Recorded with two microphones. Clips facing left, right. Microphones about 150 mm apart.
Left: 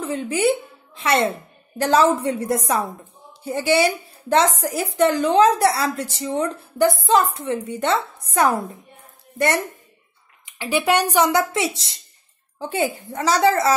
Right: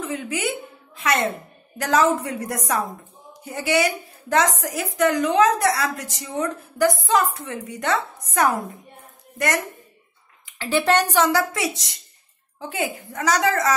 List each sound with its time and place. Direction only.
0.0 s a woman's voice: 30° left (ahead or behind)
10.4 s a woman's voice: 15° left (ahead or behind); by 13.7 s 30° left (ahead or behind)